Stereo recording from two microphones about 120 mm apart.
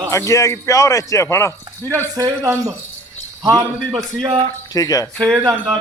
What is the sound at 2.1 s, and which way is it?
A man's voice, 25° right (ahead or behind).